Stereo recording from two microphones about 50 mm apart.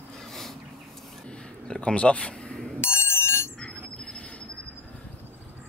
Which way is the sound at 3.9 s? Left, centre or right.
Centre.